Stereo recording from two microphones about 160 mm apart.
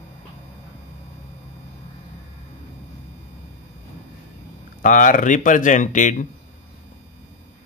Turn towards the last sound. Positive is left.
turn(degrees=50)  # may be behind; listen again after turning